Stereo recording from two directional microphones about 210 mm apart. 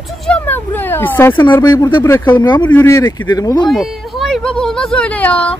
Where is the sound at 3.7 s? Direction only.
Centre (ahead or behind).